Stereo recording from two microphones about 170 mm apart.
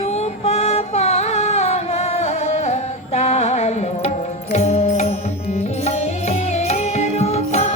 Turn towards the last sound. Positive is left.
turn(degrees=40)  # may be behind; listen again after turning